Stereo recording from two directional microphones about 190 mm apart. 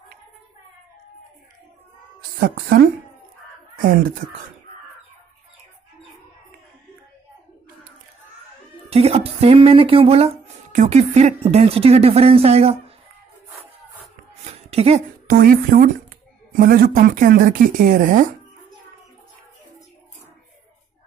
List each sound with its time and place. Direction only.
8.9 s speech: 30° right (ahead or behind)
14.4 s a sound: 35° right (ahead or behind)
15.2 s speech: 50° right (ahead or behind)